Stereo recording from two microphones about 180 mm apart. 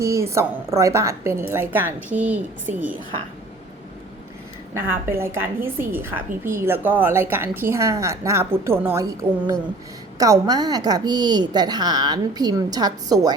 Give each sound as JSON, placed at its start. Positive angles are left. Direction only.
{"t": 0.0, "sound": "a woman's voice", "side_deg": -15}
{"t": 4.7, "sound": "a woman's voice", "side_deg": -15}